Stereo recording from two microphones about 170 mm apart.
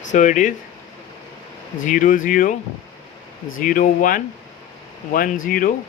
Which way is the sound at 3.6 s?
55° left (ahead or behind).